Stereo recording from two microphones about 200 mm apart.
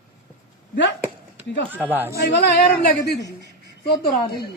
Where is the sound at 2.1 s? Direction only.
55° left (ahead or behind).